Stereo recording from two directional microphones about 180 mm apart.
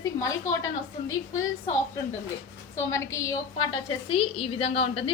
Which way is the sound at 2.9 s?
15° left (ahead or behind).